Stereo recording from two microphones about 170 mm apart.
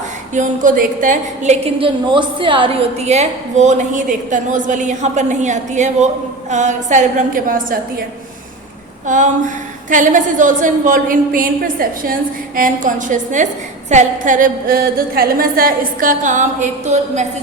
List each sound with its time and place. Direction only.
0.3 s a woman's voice: 50° right (ahead or behind)
9.0 s a woman's voice: 50° right (ahead or behind)